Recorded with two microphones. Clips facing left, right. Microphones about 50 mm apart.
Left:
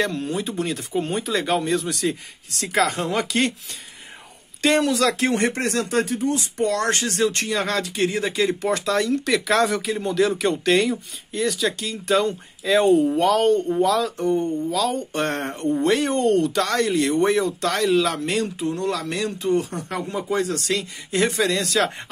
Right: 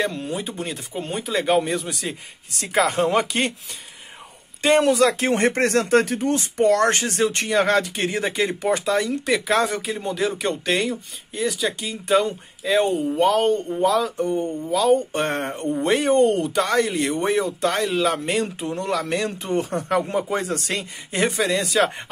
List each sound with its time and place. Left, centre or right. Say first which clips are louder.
0.0 s speech: left 1 dB; centre
1.4 s speech: right 5 dB; centre
2.9 s speech: right 4 dB; right
4.6 s speech: right 2 dB; centre
4.8 s speech: right 2 dB; right
8.6 s speech: even; centre
14.7 s speech: right 5 dB; centre
21.3 s speech: even; centre